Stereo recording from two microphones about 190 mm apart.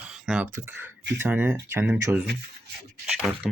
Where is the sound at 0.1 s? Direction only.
Centre (ahead or behind).